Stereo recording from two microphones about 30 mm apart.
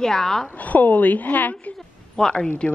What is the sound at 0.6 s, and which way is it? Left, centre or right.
A woman's voice, left.